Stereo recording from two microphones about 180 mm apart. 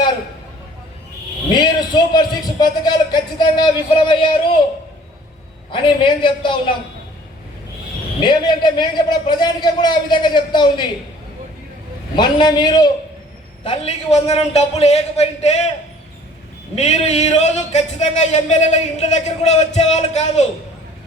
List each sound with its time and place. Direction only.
1.6 s a man's voice: 25° left (ahead or behind)
5.7 s a man's voice: 25° left (ahead or behind)
8.2 s a man's voice: 25° left (ahead or behind)
12.1 s a man's voice: 25° left (ahead or behind)
13.7 s speech: 35° left (ahead or behind)
16.7 s speech: 40° left (ahead or behind)